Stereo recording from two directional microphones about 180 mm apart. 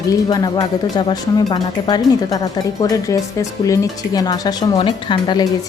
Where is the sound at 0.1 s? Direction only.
20° left (ahead or behind).